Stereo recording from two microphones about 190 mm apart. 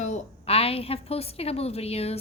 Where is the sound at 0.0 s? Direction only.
35° left (ahead or behind).